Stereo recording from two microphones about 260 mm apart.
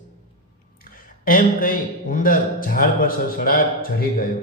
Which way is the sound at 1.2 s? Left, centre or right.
Left.